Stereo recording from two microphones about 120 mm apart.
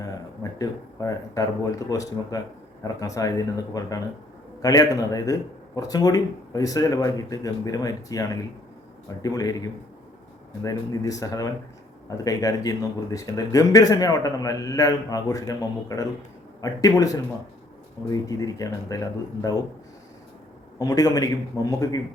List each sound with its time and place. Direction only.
0.6 s speech: 30° left (ahead or behind)
20.7 s speech: 30° left (ahead or behind)